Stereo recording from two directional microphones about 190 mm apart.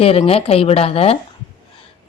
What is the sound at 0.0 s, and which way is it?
A woman's voice, 30° left (ahead or behind).